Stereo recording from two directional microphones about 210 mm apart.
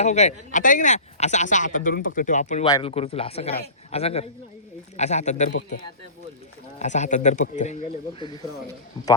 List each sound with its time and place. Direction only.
0.0 s speech: 35° left (ahead or behind)
2.6 s speech: 20° left (ahead or behind)
6.7 s speech: 35° left (ahead or behind)